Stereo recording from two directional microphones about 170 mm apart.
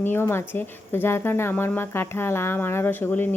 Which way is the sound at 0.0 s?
15° left (ahead or behind).